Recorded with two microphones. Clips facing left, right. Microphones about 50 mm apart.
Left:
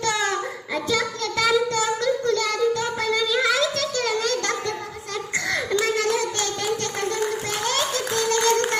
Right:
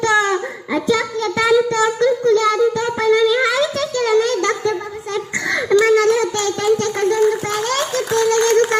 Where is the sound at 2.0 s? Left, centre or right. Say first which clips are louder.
Right 8 dB; right.